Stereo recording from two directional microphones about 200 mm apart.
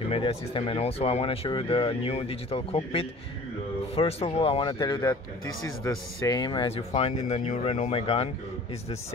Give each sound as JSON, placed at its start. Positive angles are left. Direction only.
{"t": 0.1, "sound": "speech", "side_deg": 30}